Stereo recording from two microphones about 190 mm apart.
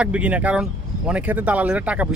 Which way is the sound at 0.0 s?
5° right (ahead or behind).